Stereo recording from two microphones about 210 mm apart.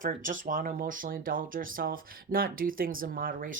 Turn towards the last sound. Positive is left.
turn(degrees=-40)  # may be behind; listen again after turning